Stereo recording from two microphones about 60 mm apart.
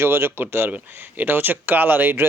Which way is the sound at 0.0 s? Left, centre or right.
Right.